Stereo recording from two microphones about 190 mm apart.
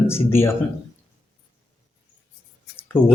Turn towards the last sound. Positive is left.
turn(degrees=10)  # may be behind; listen again after turning